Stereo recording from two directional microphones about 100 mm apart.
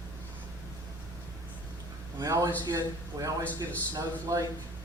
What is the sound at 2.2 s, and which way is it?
A man's voice, 35° right (ahead or behind).